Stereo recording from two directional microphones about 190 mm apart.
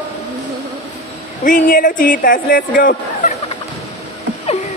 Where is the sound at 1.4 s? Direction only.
45° left (ahead or behind).